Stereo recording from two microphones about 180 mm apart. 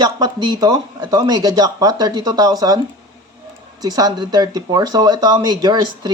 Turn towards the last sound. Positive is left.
turn(degrees=-25)  # may be behind; listen again after turning